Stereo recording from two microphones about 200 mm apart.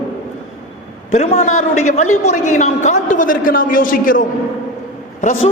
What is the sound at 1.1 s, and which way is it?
A man's voice, 30° left (ahead or behind).